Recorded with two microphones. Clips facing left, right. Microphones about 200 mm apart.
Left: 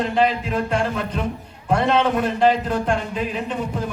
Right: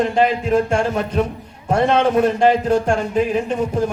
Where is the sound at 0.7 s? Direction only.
45° right (ahead or behind).